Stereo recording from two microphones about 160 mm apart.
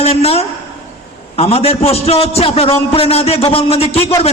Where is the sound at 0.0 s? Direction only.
40° left (ahead or behind).